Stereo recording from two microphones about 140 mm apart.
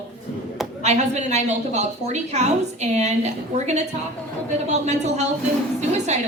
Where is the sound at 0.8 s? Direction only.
55° right (ahead or behind).